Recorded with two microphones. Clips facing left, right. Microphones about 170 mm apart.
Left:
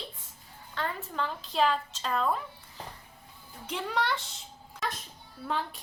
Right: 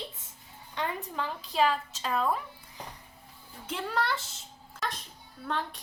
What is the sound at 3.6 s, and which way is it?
Speech, 5° right (ahead or behind).